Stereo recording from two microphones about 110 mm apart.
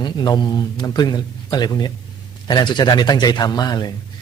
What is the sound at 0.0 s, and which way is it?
Speech, 40° left (ahead or behind).